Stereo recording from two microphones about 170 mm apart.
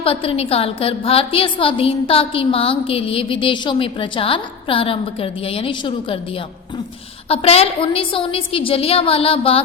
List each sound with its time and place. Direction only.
0.0 s a woman's voice: 35° left (ahead or behind)
7.3 s a woman's voice: 35° left (ahead or behind)